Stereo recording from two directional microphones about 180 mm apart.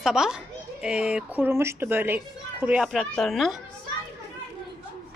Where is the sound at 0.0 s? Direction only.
5° right (ahead or behind).